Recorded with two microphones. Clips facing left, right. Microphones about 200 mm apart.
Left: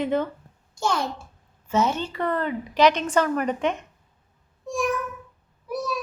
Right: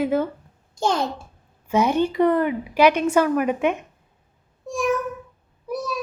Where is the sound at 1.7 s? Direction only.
15° right (ahead or behind).